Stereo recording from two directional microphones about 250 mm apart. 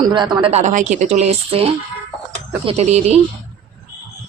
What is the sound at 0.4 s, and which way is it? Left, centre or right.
A woman's voice, right.